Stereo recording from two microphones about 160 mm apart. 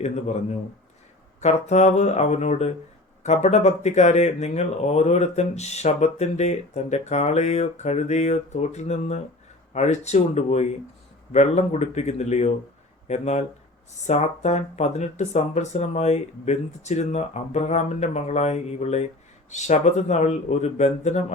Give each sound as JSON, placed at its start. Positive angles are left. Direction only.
{"t": 1.4, "sound": "speech", "side_deg": 45}